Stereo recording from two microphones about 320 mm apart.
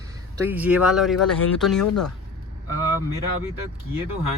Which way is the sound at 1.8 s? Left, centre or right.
Left.